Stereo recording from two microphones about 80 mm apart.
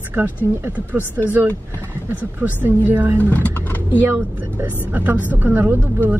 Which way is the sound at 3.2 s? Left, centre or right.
Centre.